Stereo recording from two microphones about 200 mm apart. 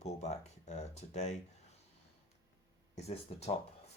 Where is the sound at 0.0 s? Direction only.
35° left (ahead or behind).